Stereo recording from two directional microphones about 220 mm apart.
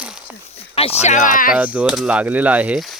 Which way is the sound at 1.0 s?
35° left (ahead or behind).